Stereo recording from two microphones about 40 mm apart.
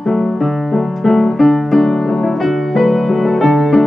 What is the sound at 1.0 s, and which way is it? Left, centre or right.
Music, centre.